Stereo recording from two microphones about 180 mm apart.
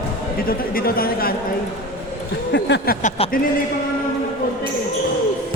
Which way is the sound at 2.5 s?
70° left (ahead or behind).